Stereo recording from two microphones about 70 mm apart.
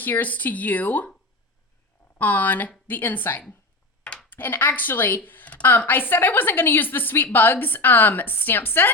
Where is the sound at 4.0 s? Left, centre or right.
Centre.